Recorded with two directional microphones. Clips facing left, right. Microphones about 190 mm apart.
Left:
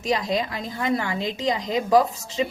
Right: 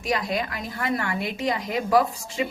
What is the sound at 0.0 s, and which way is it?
A woman's voice, 20° left (ahead or behind).